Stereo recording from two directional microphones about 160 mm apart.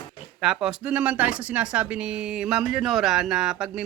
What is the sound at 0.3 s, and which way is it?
Speech, 5° right (ahead or behind).